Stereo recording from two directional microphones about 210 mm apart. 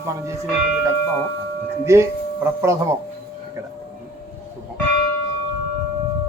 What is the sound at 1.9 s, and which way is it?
Speech, 15° right (ahead or behind).